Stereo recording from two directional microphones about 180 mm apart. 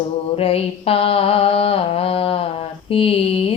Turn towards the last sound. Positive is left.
turn(degrees=30)  # may be behind; listen again after turning